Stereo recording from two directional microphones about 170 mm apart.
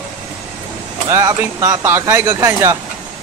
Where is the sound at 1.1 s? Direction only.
15° right (ahead or behind).